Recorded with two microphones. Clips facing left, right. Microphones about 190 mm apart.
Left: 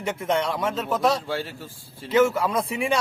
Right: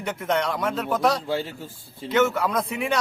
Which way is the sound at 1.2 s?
10° right (ahead or behind).